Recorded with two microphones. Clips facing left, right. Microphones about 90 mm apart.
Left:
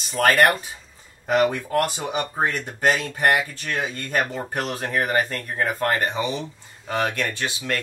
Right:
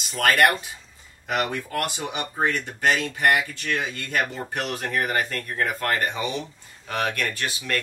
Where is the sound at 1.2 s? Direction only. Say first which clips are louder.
Left 6 dB; 35° left (ahead or behind).